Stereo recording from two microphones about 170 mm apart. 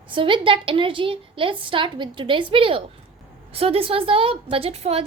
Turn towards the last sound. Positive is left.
turn(degrees=-35)  # may be behind; listen again after turning